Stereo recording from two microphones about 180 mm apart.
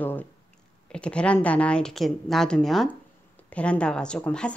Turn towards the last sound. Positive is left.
turn(degrees=5)  # may be behind; listen again after turning